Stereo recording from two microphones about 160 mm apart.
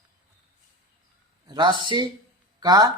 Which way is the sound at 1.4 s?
30° right (ahead or behind).